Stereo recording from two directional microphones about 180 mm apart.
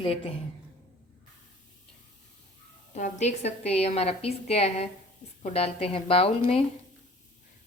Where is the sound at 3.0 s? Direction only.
45° left (ahead or behind).